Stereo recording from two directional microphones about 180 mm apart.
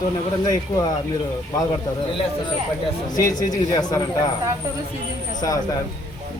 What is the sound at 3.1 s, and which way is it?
Speech, 20° left (ahead or behind).